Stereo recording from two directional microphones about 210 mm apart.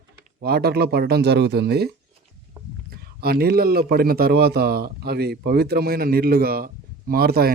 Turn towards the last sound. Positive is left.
turn(degrees=-45)  # may be behind; listen again after turning